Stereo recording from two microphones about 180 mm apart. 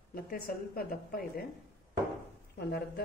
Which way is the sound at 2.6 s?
65° left (ahead or behind).